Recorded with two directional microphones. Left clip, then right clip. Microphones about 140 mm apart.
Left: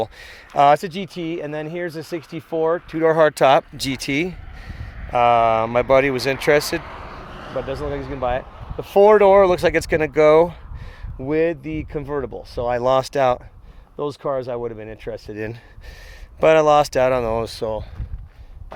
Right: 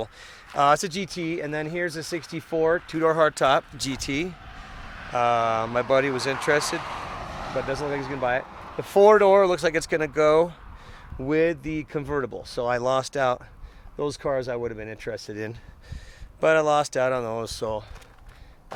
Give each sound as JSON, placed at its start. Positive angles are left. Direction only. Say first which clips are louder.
{"t": 0.0, "sound": "speech", "louder": "left 8 dB", "side_deg": 55}
{"t": 0.8, "sound": "speech", "louder": "left 2 dB", "side_deg": 30}
{"t": 3.1, "sound": "speech", "louder": "left 6 dB", "side_deg": 60}
{"t": 7.7, "sound": "speech", "louder": "left 1 dB", "side_deg": 35}
{"t": 9.0, "sound": "speech", "louder": "left 4 dB", "side_deg": 50}
{"t": 11.2, "sound": "speech", "louder": "left 3 dB", "side_deg": 30}
{"t": 12.8, "sound": "speech", "louder": "left 9 dB", "side_deg": 60}
{"t": 14.0, "sound": "speech", "louder": "left 3 dB", "side_deg": 35}
{"t": 16.4, "sound": "speech", "louder": "left 7 dB", "side_deg": 70}